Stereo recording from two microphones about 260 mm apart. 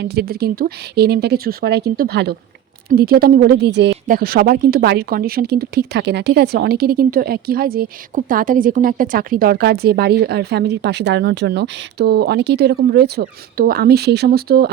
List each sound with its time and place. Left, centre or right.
0.0 s a woman's voice: right